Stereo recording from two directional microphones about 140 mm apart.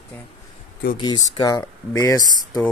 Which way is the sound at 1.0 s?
30° left (ahead or behind).